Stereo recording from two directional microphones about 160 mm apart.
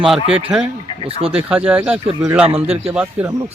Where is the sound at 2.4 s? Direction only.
35° right (ahead or behind).